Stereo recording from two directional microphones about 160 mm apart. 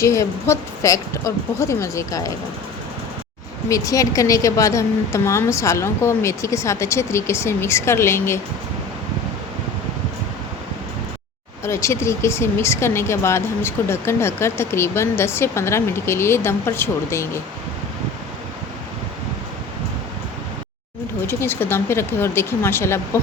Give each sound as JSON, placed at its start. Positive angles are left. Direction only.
{"t": 0.0, "sound": "a woman's voice", "side_deg": 15}
{"t": 3.7, "sound": "speech", "side_deg": 20}
{"t": 11.6, "sound": "speech", "side_deg": 15}
{"t": 21.2, "sound": "speech", "side_deg": 15}